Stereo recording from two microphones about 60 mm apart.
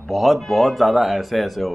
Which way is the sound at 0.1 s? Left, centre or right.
Centre.